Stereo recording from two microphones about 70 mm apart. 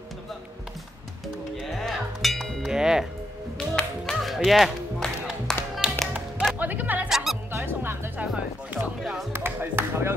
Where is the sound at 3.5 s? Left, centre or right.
Centre.